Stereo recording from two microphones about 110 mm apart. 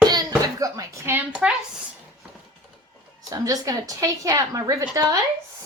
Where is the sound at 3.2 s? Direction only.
35° right (ahead or behind).